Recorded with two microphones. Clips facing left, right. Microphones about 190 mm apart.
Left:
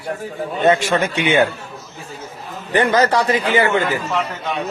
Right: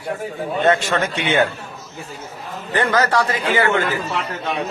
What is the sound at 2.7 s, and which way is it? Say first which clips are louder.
Speech: left 3 dB; 20° left (ahead or behind).